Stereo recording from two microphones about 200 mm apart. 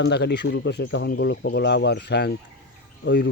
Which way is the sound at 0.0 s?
60° left (ahead or behind).